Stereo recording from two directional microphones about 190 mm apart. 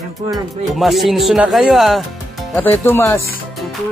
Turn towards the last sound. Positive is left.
turn(degrees=15)  # may be behind; listen again after turning